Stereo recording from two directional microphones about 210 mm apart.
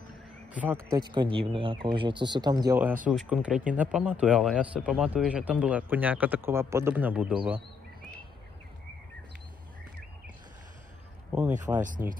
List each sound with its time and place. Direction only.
0.5 s speech: 5° right (ahead or behind)
0.9 s speech: 25° right (ahead or behind); by 7.6 s 5° right (ahead or behind)
11.7 s speech: 10° right (ahead or behind)